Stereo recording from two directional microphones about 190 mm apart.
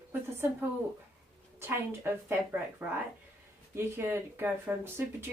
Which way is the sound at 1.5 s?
10° right (ahead or behind).